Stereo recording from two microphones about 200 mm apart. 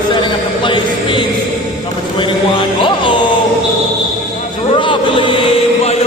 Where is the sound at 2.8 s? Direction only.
25° left (ahead or behind).